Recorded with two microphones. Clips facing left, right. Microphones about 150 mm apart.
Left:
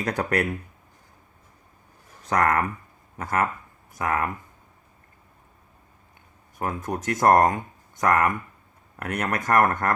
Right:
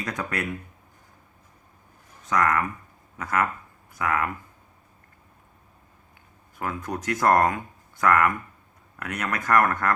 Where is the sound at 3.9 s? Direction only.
40° left (ahead or behind).